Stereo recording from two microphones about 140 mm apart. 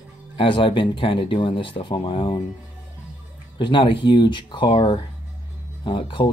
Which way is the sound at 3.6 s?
35° left (ahead or behind).